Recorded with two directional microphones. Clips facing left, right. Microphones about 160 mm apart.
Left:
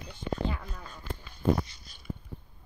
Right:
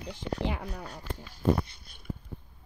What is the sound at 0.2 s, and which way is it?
Speech, 80° right.